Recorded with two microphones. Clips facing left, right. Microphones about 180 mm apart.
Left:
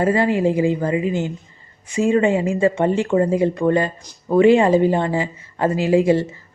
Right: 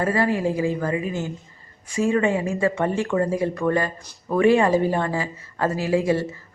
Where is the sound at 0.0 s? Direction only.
25° left (ahead or behind).